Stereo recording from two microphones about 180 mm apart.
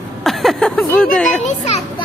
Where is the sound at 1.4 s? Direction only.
40° left (ahead or behind).